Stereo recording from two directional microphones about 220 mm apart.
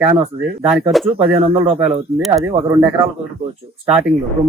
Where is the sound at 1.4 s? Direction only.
25° right (ahead or behind).